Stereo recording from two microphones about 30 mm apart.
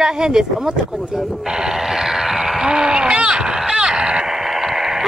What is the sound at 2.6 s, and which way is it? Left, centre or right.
Speech, right.